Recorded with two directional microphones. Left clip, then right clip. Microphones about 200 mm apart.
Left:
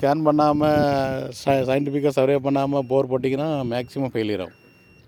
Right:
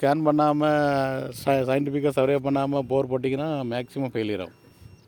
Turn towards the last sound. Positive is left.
turn(degrees=15)  # may be behind; listen again after turning